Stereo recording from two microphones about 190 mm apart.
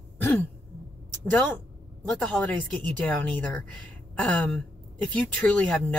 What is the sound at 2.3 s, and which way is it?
Speech, centre (ahead or behind).